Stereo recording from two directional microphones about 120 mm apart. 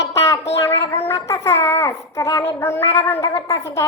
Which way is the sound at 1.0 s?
25° left (ahead or behind).